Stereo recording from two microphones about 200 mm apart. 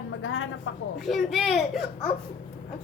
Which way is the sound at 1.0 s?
Centre (ahead or behind).